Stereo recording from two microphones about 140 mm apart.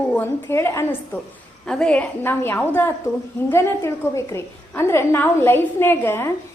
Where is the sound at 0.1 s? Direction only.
15° left (ahead or behind).